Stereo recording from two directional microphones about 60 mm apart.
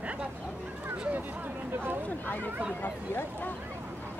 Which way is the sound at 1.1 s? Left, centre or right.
Right.